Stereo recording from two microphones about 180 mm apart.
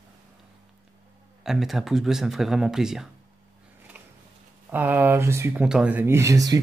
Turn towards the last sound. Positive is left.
turn(degrees=-20)  # may be behind; listen again after turning